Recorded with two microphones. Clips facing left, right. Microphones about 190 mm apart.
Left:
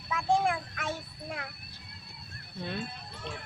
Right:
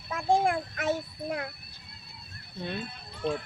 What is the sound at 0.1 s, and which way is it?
Speech, 40° right (ahead or behind).